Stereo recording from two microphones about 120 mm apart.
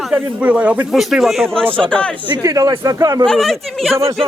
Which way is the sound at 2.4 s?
30° right (ahead or behind).